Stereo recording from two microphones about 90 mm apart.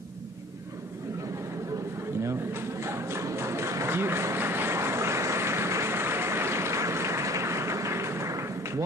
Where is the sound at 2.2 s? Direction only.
30° right (ahead or behind).